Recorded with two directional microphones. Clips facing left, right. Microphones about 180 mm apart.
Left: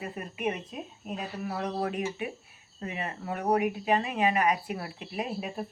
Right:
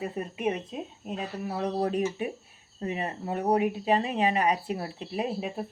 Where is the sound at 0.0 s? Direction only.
30° right (ahead or behind).